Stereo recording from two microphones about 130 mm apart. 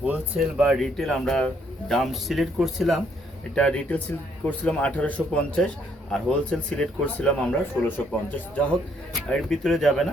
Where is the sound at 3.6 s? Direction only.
10° left (ahead or behind).